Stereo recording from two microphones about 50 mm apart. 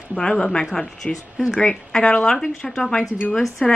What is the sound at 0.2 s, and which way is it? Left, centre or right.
A woman's voice, centre.